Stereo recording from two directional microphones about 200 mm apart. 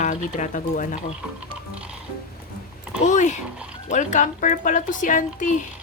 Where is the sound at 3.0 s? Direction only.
35° left (ahead or behind).